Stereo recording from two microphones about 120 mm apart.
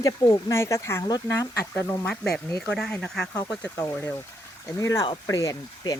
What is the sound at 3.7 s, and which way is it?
Speech, 25° left (ahead or behind).